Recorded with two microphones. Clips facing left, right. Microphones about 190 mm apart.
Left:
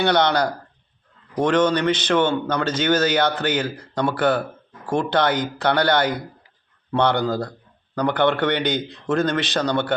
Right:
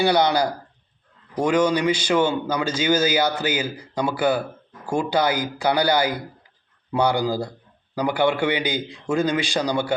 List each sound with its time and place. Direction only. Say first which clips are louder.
0.0 s a man's voice: even; 5° right (ahead or behind)